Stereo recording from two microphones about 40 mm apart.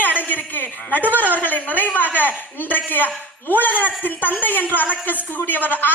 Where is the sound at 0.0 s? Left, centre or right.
Left.